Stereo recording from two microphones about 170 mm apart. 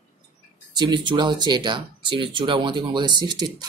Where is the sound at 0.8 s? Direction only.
25° right (ahead or behind).